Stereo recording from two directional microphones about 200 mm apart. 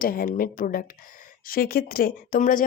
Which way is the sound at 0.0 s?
45° left (ahead or behind).